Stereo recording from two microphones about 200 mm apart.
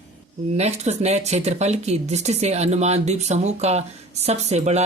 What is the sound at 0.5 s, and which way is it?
Speech, 35° right (ahead or behind).